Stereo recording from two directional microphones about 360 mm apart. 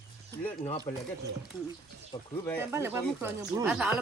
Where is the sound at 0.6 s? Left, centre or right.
Centre.